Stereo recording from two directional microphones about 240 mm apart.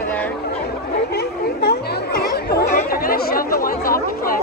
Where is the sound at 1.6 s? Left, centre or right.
Left.